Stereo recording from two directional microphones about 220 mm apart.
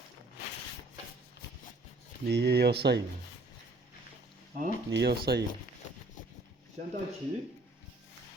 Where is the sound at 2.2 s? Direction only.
50° right (ahead or behind).